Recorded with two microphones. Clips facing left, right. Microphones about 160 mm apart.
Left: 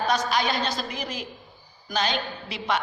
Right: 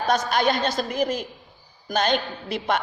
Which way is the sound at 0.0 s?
50° right (ahead or behind).